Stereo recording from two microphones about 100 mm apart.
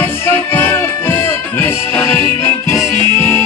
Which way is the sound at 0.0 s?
25° left (ahead or behind).